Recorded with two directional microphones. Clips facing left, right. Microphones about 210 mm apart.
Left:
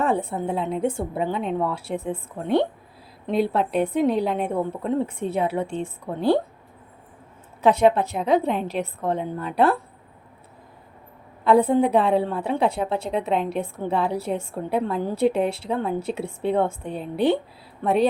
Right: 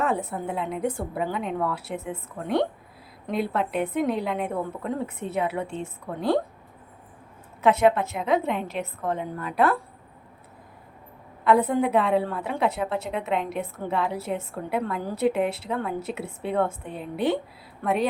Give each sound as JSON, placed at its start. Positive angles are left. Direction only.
{"t": 0.0, "sound": "a woman's voice", "side_deg": 30}
{"t": 7.6, "sound": "a woman's voice", "side_deg": 30}
{"t": 11.4, "sound": "a woman's voice", "side_deg": 30}